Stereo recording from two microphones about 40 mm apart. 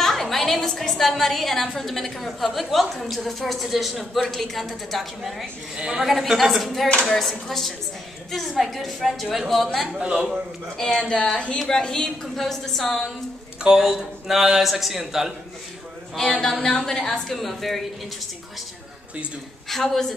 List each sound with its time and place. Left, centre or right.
0.0 s a woman's voice: centre
4.3 s a woman's voice: centre
5.8 s a man's voice: centre
6.0 s a woman's voice: centre
9.9 s a man's voice: centre
11.0 s a woman's voice: left
11.7 s a woman's voice: centre
13.6 s a man's voice: centre
16.2 s a woman's voice: centre
19.7 s a woman's voice: centre